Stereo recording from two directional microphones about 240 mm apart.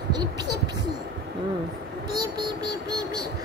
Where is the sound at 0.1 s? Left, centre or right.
Centre.